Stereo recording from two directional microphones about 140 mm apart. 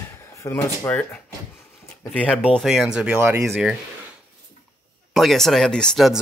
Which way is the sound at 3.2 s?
20° right (ahead or behind).